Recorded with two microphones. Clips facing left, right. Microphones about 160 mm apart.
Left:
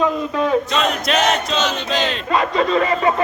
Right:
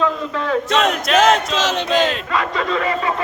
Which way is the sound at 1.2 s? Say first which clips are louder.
Right 4 dB; 90° right.